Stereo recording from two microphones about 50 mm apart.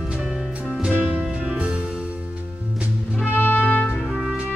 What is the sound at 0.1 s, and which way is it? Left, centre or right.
Music, centre.